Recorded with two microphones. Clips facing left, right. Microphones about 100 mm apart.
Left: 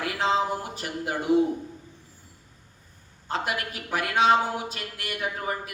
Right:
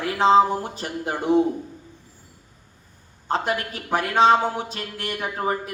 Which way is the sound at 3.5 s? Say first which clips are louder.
Right 5 dB; 35° right (ahead or behind).